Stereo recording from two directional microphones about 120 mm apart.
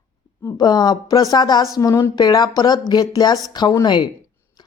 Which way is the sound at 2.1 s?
35° left (ahead or behind).